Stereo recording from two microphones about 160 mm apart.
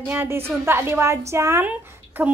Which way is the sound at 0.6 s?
15° right (ahead or behind).